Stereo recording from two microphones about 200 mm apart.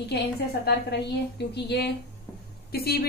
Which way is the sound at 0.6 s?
60° left (ahead or behind).